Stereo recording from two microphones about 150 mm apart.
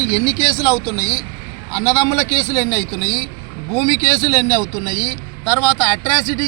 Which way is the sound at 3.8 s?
25° left (ahead or behind).